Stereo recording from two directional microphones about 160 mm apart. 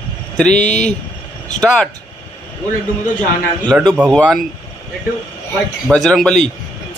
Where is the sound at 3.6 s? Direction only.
5° right (ahead or behind).